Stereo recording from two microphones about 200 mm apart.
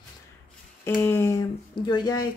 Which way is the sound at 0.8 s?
10° left (ahead or behind).